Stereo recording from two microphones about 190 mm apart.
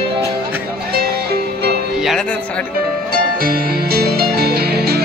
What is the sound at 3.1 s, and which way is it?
Music, 50° right (ahead or behind).